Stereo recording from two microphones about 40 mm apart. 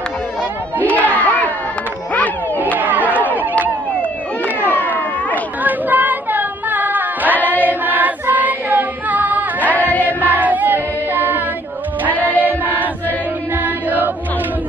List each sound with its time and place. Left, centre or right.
0.8 s crowd: left
2.8 s a sound: right
5.6 s female singing: right
7.6 s choir: right
9.8 s chant: left
10.3 s a sound: right
12.3 s choir: right
13.6 s chant: right